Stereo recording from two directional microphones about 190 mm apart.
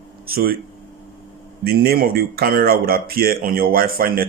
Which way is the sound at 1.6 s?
55° right (ahead or behind).